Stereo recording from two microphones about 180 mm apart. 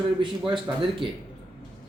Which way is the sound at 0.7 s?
15° right (ahead or behind).